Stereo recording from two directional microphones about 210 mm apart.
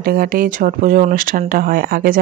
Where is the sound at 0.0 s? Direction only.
45° right (ahead or behind).